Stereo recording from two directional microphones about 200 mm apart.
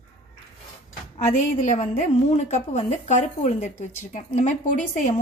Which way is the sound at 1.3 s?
40° left (ahead or behind).